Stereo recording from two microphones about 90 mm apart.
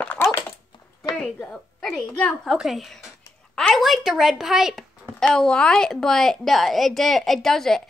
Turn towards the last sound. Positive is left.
turn(degrees=5)  # may be behind; listen again after turning